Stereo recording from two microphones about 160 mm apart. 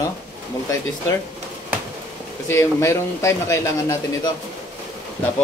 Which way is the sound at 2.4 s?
15° left (ahead or behind).